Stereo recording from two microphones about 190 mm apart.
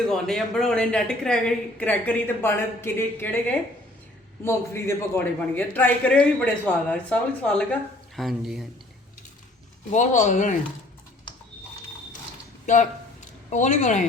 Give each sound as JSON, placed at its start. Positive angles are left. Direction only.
{"t": 0.1, "sound": "a woman's voice", "side_deg": 0}
{"t": 9.9, "sound": "speech", "side_deg": 40}
{"t": 12.6, "sound": "speech", "side_deg": 40}